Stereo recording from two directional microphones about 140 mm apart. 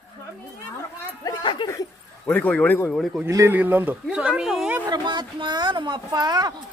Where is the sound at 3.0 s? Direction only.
Centre (ahead or behind).